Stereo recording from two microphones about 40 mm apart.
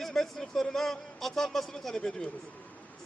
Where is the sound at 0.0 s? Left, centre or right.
Centre.